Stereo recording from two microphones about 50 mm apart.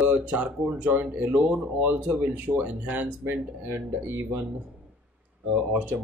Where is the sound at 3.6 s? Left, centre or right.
Right.